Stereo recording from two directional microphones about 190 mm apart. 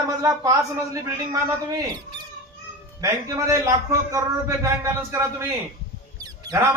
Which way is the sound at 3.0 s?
15° right (ahead or behind).